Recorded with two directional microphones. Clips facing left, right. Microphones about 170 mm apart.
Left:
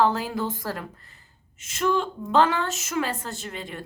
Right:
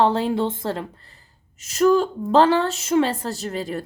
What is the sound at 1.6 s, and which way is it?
Speech, 40° right (ahead or behind).